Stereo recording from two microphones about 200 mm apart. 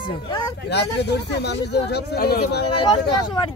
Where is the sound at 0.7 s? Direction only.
60° left (ahead or behind).